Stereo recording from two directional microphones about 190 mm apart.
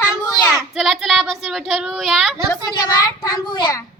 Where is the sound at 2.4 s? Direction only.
20° left (ahead or behind).